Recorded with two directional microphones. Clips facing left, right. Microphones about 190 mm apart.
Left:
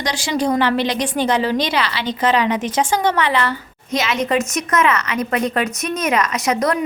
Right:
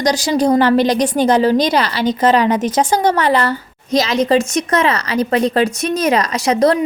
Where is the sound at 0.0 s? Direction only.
40° right (ahead or behind).